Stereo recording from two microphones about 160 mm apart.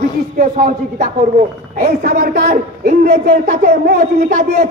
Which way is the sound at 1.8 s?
70° right (ahead or behind).